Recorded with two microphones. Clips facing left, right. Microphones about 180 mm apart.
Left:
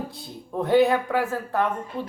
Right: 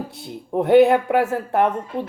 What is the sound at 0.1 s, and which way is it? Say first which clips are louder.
Speech: right 7 dB; 20° right (ahead or behind).